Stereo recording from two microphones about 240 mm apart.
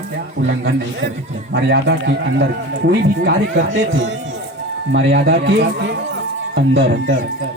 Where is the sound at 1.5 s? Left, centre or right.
Right.